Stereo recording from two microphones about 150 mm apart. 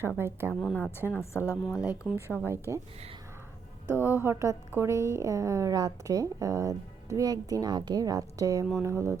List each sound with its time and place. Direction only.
0.2 s speech: 15° right (ahead or behind)
0.6 s a woman's voice: 10° left (ahead or behind)
1.8 s speech: 10° right (ahead or behind)
3.8 s a woman's voice: 15° right (ahead or behind)